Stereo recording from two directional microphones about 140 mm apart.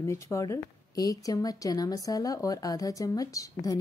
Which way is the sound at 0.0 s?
20° left (ahead or behind).